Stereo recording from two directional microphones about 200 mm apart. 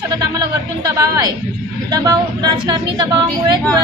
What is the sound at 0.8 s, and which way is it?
Speech, 15° right (ahead or behind).